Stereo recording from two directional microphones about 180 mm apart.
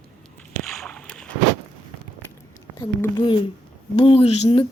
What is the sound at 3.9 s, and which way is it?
Speech, 30° left (ahead or behind).